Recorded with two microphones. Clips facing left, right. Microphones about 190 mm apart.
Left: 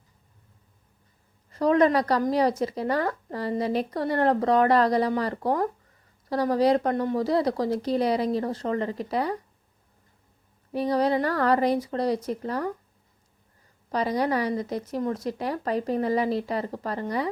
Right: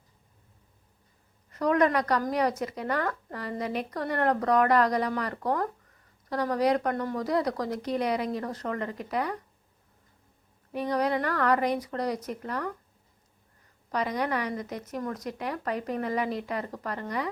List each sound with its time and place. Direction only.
1.5 s speech: 30° left (ahead or behind)
10.7 s speech: 30° left (ahead or behind)
13.9 s speech: 30° left (ahead or behind)